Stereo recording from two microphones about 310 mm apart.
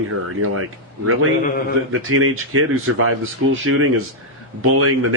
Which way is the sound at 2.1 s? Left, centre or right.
Right.